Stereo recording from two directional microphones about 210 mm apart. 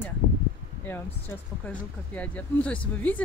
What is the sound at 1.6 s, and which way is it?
Speech, 5° left (ahead or behind).